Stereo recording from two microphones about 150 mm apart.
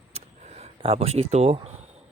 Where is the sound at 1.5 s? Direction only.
45° right (ahead or behind).